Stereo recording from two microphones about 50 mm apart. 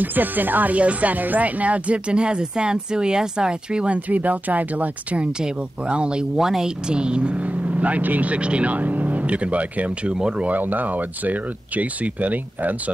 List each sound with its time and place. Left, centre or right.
0.0 s speech: right
5.2 s speech: right
10.1 s speech: centre
10.4 s speech: right